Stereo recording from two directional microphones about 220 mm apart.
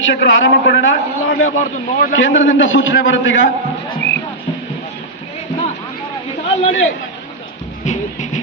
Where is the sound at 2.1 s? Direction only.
60° left (ahead or behind).